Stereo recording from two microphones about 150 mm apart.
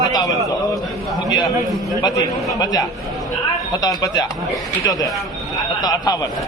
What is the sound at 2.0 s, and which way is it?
A man's voice, 25° left (ahead or behind).